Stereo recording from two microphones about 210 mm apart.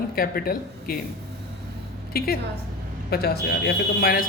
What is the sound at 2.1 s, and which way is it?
A man's voice, 45° left (ahead or behind).